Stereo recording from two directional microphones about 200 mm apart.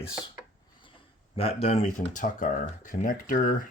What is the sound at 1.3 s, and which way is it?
Speech, 30° left (ahead or behind).